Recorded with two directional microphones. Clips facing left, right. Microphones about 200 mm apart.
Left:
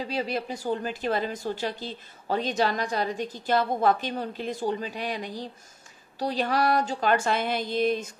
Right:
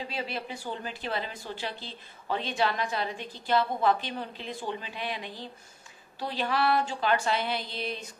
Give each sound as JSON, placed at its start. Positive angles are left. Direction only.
{"t": 0.1, "sound": "a woman's voice", "side_deg": 40}